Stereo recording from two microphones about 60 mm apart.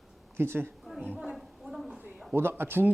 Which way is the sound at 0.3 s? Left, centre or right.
Right.